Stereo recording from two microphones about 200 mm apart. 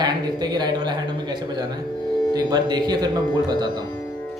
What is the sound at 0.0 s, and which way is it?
A man's voice, 20° right (ahead or behind).